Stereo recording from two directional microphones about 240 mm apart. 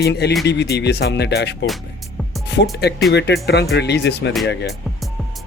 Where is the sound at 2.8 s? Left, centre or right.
Left.